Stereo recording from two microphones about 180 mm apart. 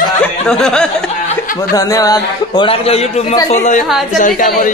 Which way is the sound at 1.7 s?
20° left (ahead or behind).